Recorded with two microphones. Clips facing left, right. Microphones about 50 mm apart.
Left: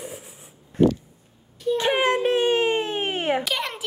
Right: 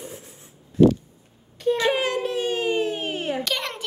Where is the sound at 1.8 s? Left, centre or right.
Left.